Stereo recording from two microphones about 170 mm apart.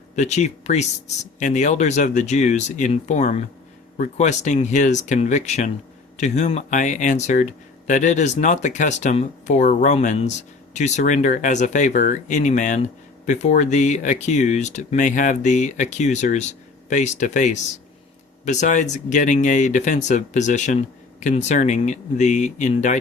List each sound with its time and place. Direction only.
0.2 s speech: 40° left (ahead or behind)